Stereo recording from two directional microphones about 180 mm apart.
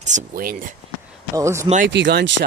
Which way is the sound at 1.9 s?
75° right (ahead or behind).